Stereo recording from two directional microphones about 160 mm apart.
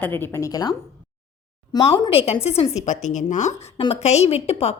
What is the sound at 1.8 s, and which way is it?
A woman's voice, 35° left (ahead or behind).